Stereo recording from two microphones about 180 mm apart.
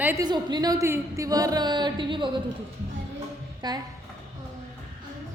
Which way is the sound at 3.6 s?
25° right (ahead or behind).